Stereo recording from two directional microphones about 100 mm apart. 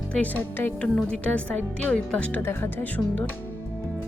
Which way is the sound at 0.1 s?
15° left (ahead or behind).